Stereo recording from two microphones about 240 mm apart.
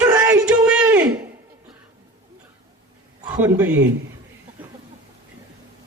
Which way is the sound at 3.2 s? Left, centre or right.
Centre.